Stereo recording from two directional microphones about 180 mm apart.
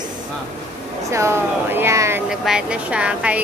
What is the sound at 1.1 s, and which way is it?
A woman's voice, 15° right (ahead or behind).